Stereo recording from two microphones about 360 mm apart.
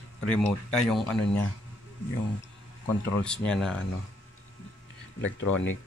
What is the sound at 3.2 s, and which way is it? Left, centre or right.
Speech, centre.